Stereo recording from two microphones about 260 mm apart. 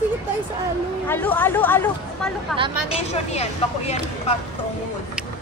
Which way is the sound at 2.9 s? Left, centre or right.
Left.